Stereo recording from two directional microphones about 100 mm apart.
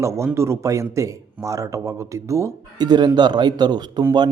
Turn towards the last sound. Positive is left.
turn(degrees=-45)  # may be behind; listen again after turning